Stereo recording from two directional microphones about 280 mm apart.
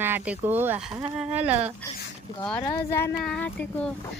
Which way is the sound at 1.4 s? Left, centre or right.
Right.